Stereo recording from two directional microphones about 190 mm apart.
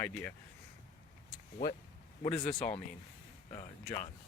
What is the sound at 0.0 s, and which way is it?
Speech, 10° left (ahead or behind).